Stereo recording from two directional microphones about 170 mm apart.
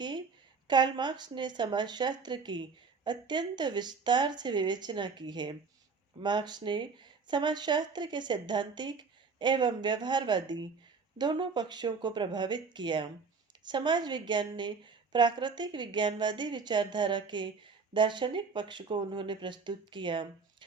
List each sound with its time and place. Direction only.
0.7 s speech: 25° right (ahead or behind)